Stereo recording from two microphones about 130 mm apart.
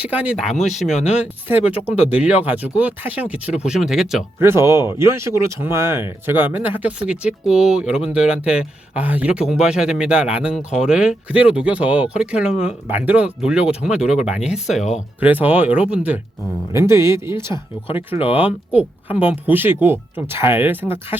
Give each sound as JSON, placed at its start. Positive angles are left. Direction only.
{"t": 0.0, "sound": "speech", "side_deg": -10}
{"t": 0.3, "sound": "speech", "side_deg": 0}
{"t": 0.9, "sound": "speech", "side_deg": 65}
{"t": 1.1, "sound": "speech", "side_deg": -10}
{"t": 4.4, "sound": "speech", "side_deg": -20}
{"t": 16.7, "sound": "speech", "side_deg": -20}